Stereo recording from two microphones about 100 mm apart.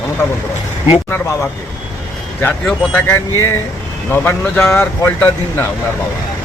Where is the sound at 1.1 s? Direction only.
25° left (ahead or behind).